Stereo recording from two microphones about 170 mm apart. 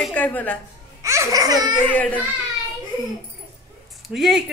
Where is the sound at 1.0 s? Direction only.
20° right (ahead or behind).